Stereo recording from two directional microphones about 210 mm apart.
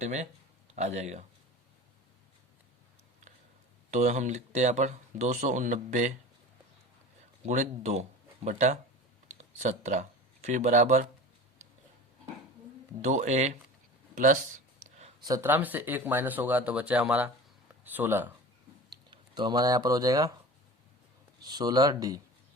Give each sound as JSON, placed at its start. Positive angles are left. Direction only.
{"t": 0.0, "sound": "speech", "side_deg": -35}
{"t": 3.9, "sound": "speech", "side_deg": -35}
{"t": 7.4, "sound": "speech", "side_deg": -35}
{"t": 13.0, "sound": "speech", "side_deg": -35}
{"t": 14.8, "sound": "a sound", "side_deg": -30}
{"t": 15.2, "sound": "speech", "side_deg": -15}
{"t": 19.1, "sound": "speech", "side_deg": -20}
{"t": 21.4, "sound": "speech", "side_deg": -20}